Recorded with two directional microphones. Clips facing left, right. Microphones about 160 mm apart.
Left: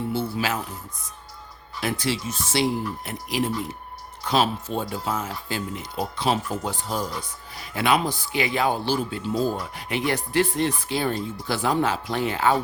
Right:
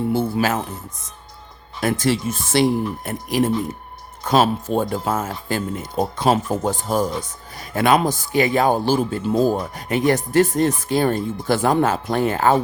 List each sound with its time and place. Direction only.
0.1 s speech: 50° right (ahead or behind)
1.8 s speech: 50° right (ahead or behind)